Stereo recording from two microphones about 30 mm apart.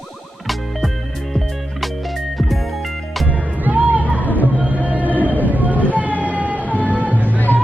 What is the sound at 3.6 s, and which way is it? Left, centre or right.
Music, right.